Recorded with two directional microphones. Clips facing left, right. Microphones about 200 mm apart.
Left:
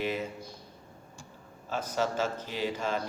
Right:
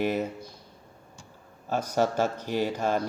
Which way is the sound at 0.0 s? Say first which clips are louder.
Right 5 dB; 50° right (ahead or behind).